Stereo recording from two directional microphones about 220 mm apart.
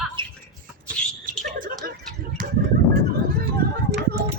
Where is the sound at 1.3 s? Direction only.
35° right (ahead or behind).